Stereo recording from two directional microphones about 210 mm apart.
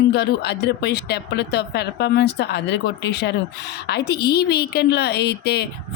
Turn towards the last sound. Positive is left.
turn(degrees=50)  # may be behind; listen again after turning